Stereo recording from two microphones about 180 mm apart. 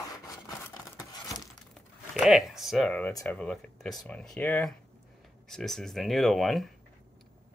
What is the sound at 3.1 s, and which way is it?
Speech, 15° left (ahead or behind).